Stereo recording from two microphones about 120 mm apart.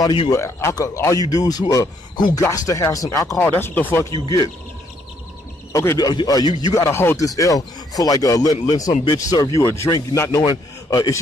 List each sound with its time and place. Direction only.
0.0 s speech: 40° left (ahead or behind)
0.3 s speech: 25° left (ahead or behind)
3.3 s speech: 15° left (ahead or behind)
4.1 s speech: 35° left (ahead or behind)
5.7 s a man's voice: 25° left (ahead or behind)